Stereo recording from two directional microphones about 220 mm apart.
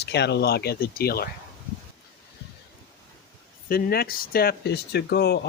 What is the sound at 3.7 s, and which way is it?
Speech, 45° left (ahead or behind).